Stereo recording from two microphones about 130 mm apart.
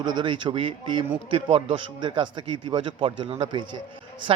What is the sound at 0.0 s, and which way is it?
A man's voice, 35° right (ahead or behind).